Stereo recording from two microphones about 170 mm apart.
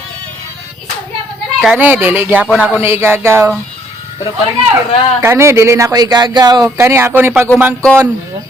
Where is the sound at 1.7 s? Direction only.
10° right (ahead or behind).